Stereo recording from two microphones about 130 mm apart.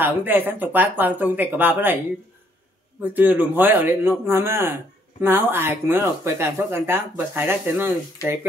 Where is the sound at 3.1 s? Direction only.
15° right (ahead or behind).